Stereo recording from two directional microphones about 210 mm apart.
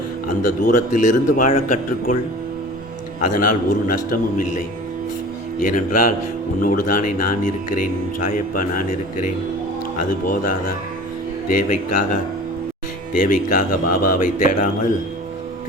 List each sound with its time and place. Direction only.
0.3 s a man's voice: 40° left (ahead or behind)
3.2 s a man's voice: 40° left (ahead or behind)
10.0 s a man's voice: 40° left (ahead or behind)
11.7 s a man's voice: 40° left (ahead or behind)
13.1 s a man's voice: 40° left (ahead or behind)